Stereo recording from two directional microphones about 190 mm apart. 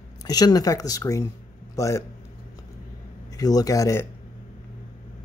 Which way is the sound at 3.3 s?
20° left (ahead or behind).